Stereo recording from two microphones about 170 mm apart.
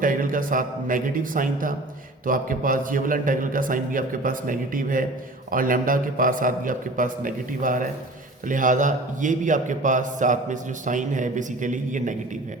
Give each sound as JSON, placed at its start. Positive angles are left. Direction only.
{"t": 0.0, "sound": "a man's voice", "side_deg": -55}